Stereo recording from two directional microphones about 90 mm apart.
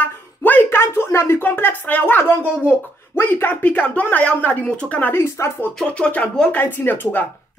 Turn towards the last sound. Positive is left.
turn(degrees=20)  # may be behind; listen again after turning